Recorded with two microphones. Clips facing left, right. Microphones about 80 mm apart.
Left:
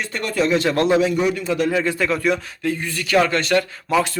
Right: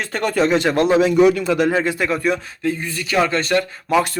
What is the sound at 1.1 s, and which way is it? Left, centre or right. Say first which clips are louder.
Speech: right 6 dB; right.